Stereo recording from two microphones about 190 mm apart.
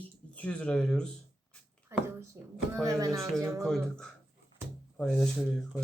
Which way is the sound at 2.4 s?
15° right (ahead or behind).